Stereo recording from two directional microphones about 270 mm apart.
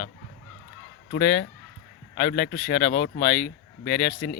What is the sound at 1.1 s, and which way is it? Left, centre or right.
Speech, left.